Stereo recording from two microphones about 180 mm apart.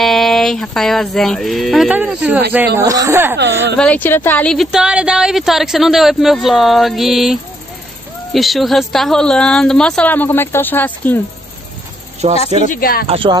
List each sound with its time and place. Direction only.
0.0 s speech: centre (ahead or behind)
3.3 s speech: 70° right (ahead or behind)
3.7 s speech: 5° left (ahead or behind)
12.2 s speech: 35° right (ahead or behind)
12.6 s speech: 50° left (ahead or behind)
13.0 s speech: 30° right (ahead or behind)